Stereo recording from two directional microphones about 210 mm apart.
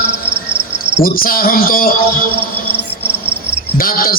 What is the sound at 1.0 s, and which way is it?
Speech, 45° left (ahead or behind).